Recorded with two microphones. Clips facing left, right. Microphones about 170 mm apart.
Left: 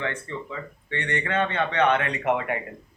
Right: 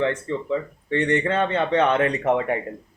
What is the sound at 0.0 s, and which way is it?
A man's voice, 35° right (ahead or behind).